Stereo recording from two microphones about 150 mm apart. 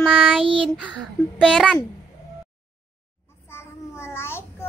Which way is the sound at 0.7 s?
5° right (ahead or behind).